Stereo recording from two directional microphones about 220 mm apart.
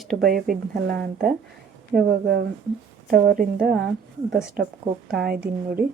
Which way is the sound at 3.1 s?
40° right (ahead or behind).